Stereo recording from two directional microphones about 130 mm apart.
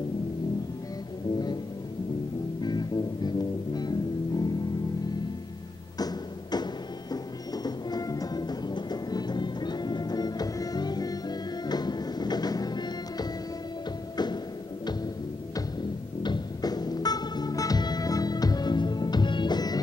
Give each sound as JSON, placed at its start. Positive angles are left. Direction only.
{"t": 2.6, "sound": "music", "side_deg": 30}
{"t": 5.9, "sound": "music", "side_deg": 30}
{"t": 16.2, "sound": "music", "side_deg": 35}